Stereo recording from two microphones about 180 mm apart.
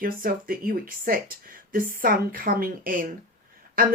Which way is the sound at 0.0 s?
50° right (ahead or behind).